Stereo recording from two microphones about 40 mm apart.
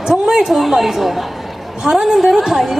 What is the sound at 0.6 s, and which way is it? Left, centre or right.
Speech, centre.